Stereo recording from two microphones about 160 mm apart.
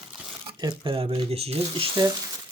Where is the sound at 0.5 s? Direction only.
30° right (ahead or behind).